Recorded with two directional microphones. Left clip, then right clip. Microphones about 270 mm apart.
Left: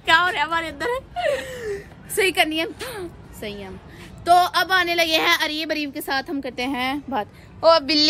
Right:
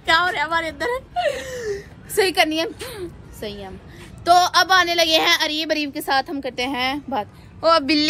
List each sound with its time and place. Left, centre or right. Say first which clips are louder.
0.0 s a sound: even; centre
1.4 s speech: right 2 dB; centre
2.8 s speech: even; left
3.4 s a woman's voice: right 1 dB; centre